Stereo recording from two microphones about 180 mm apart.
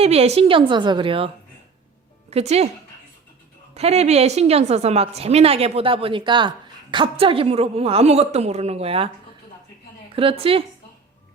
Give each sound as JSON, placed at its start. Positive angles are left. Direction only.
{"t": 0.0, "sound": "a woman's voice", "side_deg": -35}
{"t": 2.3, "sound": "a woman's voice", "side_deg": -35}
{"t": 3.8, "sound": "a woman's voice", "side_deg": -35}
{"t": 10.1, "sound": "a woman's voice", "side_deg": -30}